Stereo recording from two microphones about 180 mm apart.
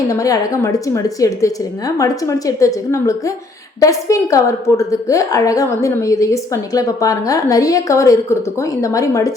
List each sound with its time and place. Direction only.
0.1 s a woman's voice: 20° left (ahead or behind)